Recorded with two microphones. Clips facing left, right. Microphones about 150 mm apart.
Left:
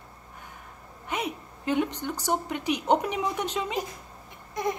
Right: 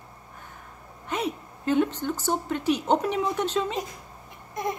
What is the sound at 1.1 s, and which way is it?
A woman's voice, 15° left (ahead or behind).